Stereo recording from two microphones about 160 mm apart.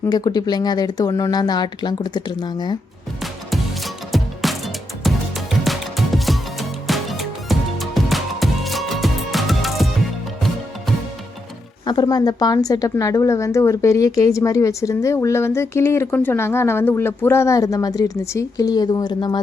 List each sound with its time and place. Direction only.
0.1 s speech: 25° left (ahead or behind)
3.5 s music: centre (ahead or behind)
11.9 s speech: 25° left (ahead or behind)